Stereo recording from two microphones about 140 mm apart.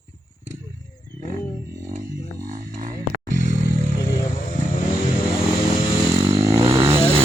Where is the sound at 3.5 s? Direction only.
70° left (ahead or behind).